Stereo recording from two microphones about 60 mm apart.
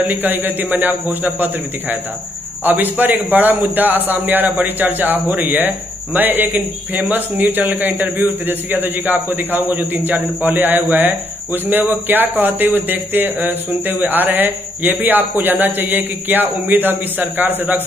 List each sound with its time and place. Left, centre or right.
0.1 s speech: right